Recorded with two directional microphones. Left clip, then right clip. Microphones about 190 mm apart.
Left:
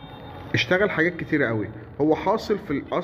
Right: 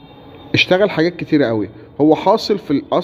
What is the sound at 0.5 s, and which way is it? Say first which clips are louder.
A man's voice: right 8 dB; 40° right (ahead or behind).